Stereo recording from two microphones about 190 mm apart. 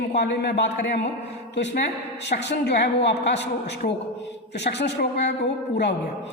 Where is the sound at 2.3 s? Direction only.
65° left (ahead or behind).